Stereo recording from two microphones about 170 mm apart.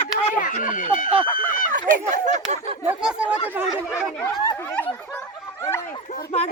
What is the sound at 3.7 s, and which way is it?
Speech, 15° left (ahead or behind).